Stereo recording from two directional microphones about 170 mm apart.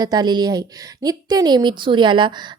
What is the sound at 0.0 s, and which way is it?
A woman's voice, 25° right (ahead or behind).